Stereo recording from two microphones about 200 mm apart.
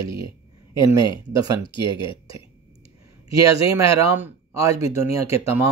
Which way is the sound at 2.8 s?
30° left (ahead or behind).